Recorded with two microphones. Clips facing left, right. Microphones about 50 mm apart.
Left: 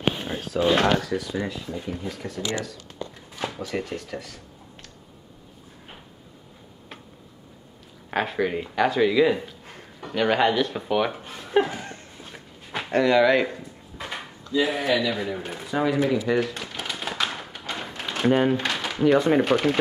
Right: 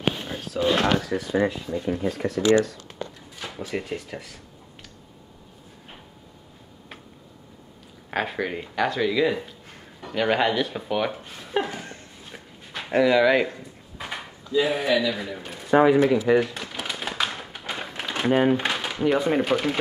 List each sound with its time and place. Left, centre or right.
0.4 s speech: left
0.7 s speech: centre
1.1 s speech: right
1.9 s speech: right
3.6 s speech: centre
8.1 s speech: centre
12.9 s a sound: centre
14.7 s speech: centre
15.9 s a sound: centre
18.2 s speech: centre
18.6 s a sound: centre
18.9 s speech: centre